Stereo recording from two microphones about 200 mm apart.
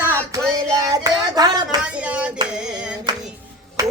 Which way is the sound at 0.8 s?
20° right (ahead or behind).